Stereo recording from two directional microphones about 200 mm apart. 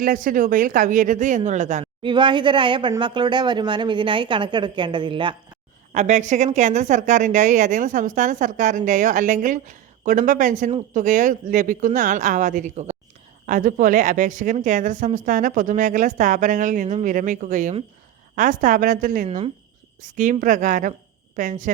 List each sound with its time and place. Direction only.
0.0 s a woman's voice: 45° right (ahead or behind)
2.0 s speech: 25° right (ahead or behind)
5.9 s a woman's voice: 35° right (ahead or behind)